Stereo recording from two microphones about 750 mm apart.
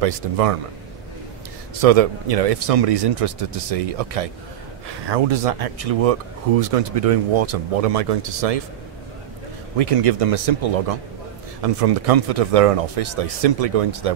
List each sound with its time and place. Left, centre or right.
0.0 s speech: right
1.8 s speech: right
9.8 s speech: right